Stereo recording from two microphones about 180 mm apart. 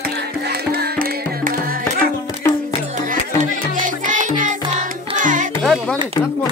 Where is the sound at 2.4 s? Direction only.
15° left (ahead or behind).